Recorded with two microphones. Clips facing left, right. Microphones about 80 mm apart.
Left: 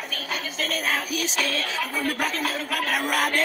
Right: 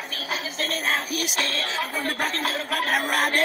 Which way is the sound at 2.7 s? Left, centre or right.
Right.